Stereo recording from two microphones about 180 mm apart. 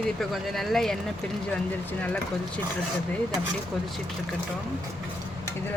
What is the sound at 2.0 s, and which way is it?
Speech, 10° left (ahead or behind).